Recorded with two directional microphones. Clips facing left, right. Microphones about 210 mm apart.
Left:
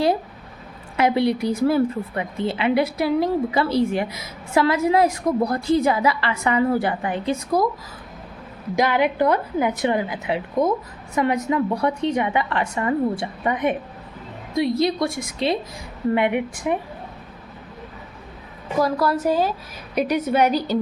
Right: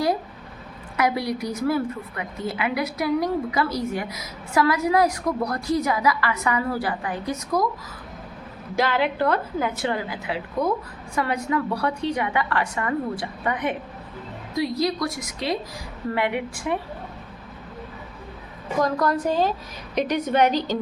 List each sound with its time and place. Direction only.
0.9 s a woman's voice: 25° left (ahead or behind)
8.7 s a woman's voice: 15° left (ahead or behind)
18.8 s a woman's voice: 5° left (ahead or behind)